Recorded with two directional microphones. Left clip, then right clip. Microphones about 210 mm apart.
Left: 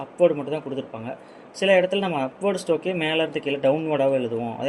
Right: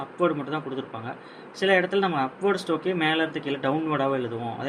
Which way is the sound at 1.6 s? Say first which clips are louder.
Left 3 dB; 40° left (ahead or behind).